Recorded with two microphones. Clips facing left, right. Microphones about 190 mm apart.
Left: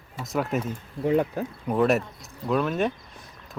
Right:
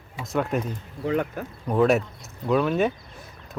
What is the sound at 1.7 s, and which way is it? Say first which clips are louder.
Speech: right 2 dB; centre (ahead or behind).